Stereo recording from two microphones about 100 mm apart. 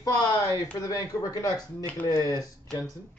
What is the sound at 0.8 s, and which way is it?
Speech, 35° left (ahead or behind).